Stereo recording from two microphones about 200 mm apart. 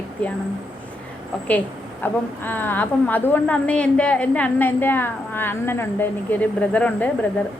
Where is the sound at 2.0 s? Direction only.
10° left (ahead or behind).